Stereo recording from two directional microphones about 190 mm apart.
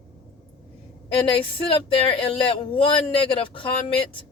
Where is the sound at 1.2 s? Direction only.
30° left (ahead or behind).